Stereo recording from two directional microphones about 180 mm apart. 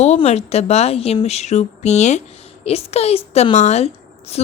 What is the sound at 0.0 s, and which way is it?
A woman's voice, 35° left (ahead or behind).